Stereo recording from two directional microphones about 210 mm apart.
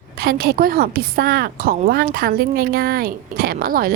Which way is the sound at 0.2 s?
45° right (ahead or behind).